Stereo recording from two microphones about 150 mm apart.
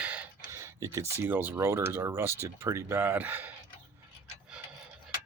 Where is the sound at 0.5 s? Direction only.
20° right (ahead or behind).